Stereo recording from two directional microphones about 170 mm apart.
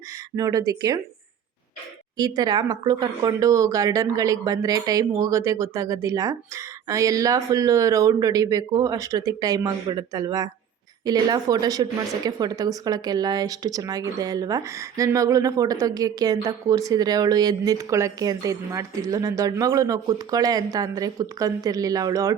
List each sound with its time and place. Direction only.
0.3 s a woman's voice: 20° right (ahead or behind)
2.1 s a woman's voice: 20° right (ahead or behind)